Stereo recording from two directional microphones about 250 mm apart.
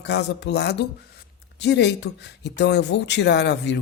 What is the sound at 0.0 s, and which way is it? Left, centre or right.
Speech, left.